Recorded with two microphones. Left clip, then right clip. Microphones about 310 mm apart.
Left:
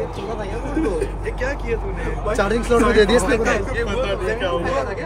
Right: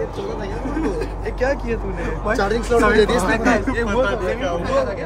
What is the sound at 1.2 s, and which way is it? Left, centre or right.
Speech, right.